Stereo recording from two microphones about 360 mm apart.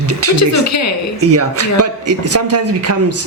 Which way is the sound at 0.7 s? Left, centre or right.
Left.